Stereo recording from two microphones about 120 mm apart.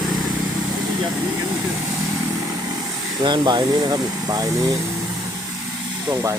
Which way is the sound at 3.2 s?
40° right (ahead or behind).